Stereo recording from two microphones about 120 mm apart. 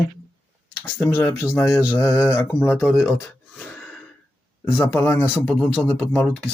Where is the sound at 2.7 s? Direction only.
10° left (ahead or behind).